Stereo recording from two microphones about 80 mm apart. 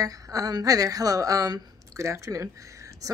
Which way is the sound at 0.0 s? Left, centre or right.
Right.